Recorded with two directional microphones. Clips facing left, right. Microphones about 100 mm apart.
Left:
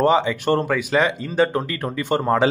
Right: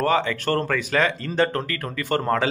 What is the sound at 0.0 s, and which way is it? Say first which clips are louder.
Speech: left 4 dB; 15° left (ahead or behind).